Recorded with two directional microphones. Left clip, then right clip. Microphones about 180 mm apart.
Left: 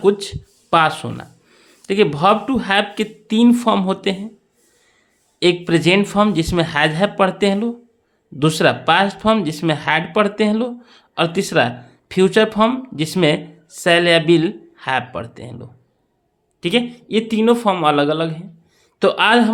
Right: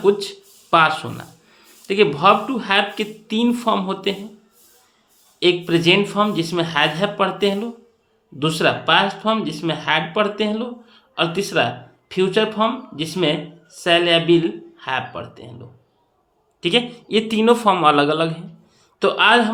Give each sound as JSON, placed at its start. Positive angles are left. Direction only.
{"t": 0.0, "sound": "speech", "side_deg": 40}
{"t": 5.4, "sound": "speech", "side_deg": 40}